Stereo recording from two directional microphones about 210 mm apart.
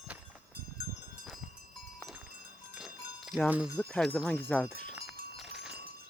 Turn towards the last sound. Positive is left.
turn(degrees=0)  # may be behind; listen again after turning